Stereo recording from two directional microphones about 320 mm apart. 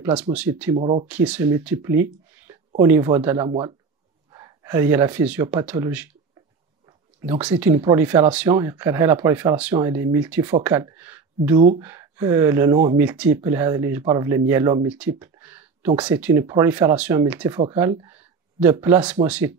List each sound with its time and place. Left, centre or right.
0.0 s speech: centre
0.7 s speech: centre
1.0 s speech: centre
7.2 s speech: centre